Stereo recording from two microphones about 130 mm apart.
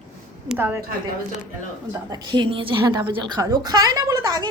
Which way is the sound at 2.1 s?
35° right (ahead or behind).